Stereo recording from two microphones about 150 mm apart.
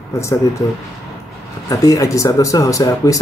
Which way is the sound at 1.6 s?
25° left (ahead or behind).